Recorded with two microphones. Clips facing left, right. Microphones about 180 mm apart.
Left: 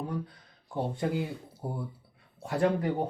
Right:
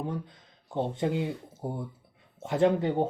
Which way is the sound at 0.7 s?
25° right (ahead or behind).